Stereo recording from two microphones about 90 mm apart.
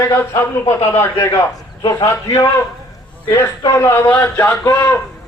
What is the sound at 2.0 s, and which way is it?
Speech, 35° left (ahead or behind).